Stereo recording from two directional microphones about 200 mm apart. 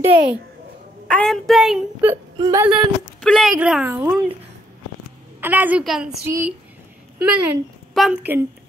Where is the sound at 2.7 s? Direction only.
Centre (ahead or behind).